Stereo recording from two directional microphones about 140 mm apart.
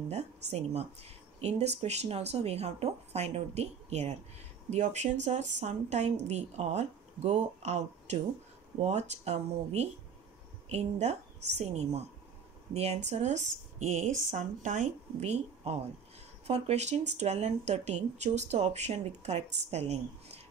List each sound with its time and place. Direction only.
0.1 s speech: 50° right (ahead or behind)